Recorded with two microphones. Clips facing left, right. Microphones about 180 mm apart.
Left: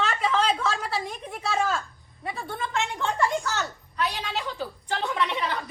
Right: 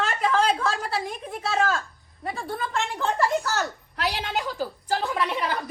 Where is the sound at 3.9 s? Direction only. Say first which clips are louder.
Even; 75° right (ahead or behind).